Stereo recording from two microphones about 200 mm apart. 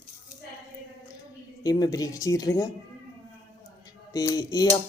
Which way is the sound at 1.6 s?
15° left (ahead or behind).